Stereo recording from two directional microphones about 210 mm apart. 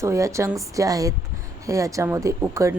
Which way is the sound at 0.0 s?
15° right (ahead or behind).